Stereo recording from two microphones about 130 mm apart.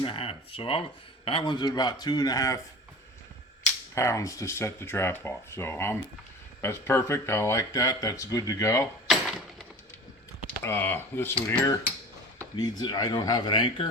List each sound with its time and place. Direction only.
0.0 s speech: 45° left (ahead or behind); by 2.6 s 25° left (ahead or behind)
3.9 s speech: 20° left (ahead or behind)
9.0 s a sound: centre (ahead or behind)
10.6 s speech: 15° left (ahead or behind)
12.5 s speech: 35° left (ahead or behind)